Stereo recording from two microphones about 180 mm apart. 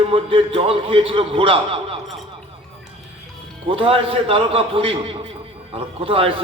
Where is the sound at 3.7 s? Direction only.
30° right (ahead or behind).